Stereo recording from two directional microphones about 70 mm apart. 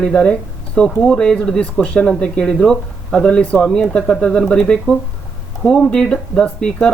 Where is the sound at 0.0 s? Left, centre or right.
Centre.